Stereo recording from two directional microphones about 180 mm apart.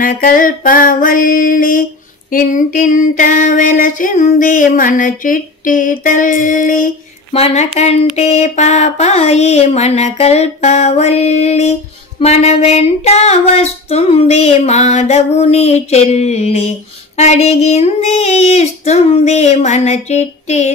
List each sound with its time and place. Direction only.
0.0 s female singing: 50° left (ahead or behind)
7.3 s female singing: 35° left (ahead or behind)